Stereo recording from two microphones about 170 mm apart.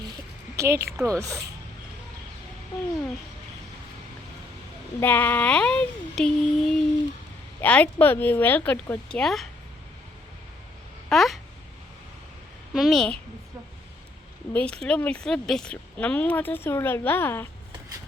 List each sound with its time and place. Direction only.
0.5 s a woman's voice: 15° right (ahead or behind)
4.9 s speech: 10° left (ahead or behind)
11.1 s a woman's voice: centre (ahead or behind)
12.7 s a woman's voice: centre (ahead or behind)
14.5 s speech: 5° left (ahead or behind)